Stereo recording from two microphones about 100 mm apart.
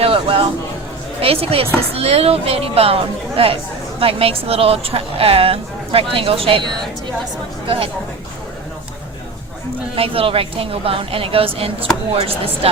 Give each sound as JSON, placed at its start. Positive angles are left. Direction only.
{"t": 0.0, "sound": "a sound", "side_deg": -70}
{"t": 1.2, "sound": "a woman's voice", "side_deg": -70}
{"t": 9.9, "sound": "a woman's voice", "side_deg": -70}